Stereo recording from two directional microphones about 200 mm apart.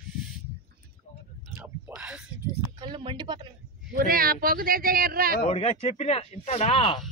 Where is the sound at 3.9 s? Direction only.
50° right (ahead or behind).